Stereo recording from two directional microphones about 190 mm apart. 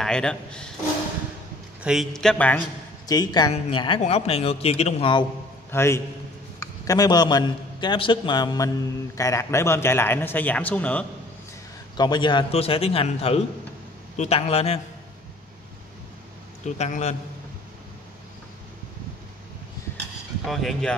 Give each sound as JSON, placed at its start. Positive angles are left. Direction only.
{"t": 0.0, "sound": "speech", "side_deg": 5}
{"t": 1.8, "sound": "speech", "side_deg": 0}
{"t": 3.1, "sound": "a man's voice", "side_deg": 20}
{"t": 5.7, "sound": "a man's voice", "side_deg": 15}
{"t": 12.0, "sound": "a man's voice", "side_deg": 25}
{"t": 16.6, "sound": "a man's voice", "side_deg": 40}
{"t": 20.4, "sound": "speech", "side_deg": 0}